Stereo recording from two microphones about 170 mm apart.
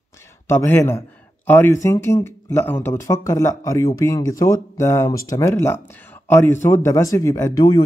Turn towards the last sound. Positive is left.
turn(degrees=20)  # may be behind; listen again after turning